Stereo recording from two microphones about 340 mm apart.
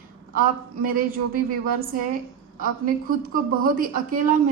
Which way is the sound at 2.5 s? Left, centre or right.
Right.